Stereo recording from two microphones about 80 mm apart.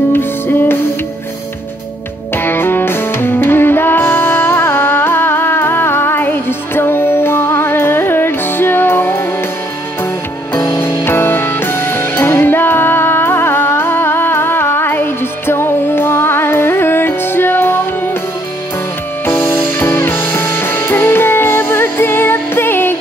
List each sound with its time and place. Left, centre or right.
0.1 s music: left
2.3 s music: left
10.8 s music: left
19.2 s music: left